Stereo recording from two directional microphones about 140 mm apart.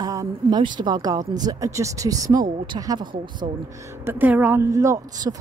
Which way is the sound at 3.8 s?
15° right (ahead or behind).